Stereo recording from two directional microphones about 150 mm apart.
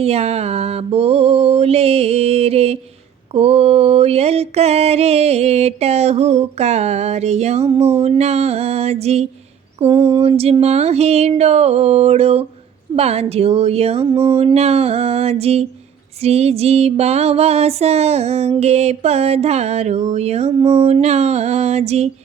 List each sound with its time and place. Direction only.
0.0 s mantra: 45° right (ahead or behind)